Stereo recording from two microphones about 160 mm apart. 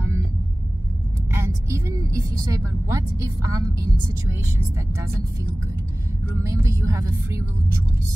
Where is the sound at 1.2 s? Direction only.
15° right (ahead or behind).